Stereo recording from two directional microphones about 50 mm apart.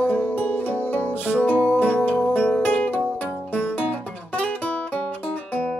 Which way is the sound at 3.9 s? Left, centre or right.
Left.